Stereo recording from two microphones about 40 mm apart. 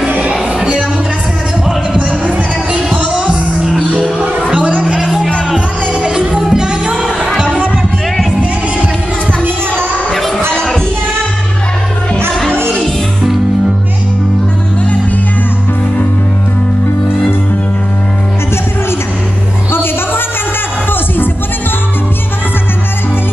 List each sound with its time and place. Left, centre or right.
3.0 s music: right
4.6 s music: right
5.0 s music: centre
5.9 s music: centre
7.3 s a sound: right
10.1 s a sound: centre
12.8 s music: centre
19.7 s music: left